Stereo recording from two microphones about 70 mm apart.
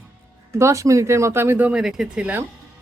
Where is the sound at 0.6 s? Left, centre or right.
Right.